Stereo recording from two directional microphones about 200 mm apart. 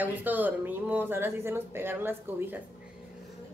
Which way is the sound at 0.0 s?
10° right (ahead or behind).